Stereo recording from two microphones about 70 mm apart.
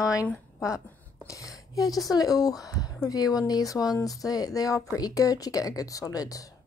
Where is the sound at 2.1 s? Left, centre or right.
Left.